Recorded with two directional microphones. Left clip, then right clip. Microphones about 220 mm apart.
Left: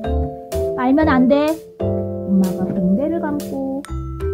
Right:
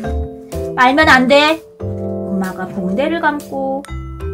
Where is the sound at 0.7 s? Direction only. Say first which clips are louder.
Right 8 dB; 25° left (ahead or behind).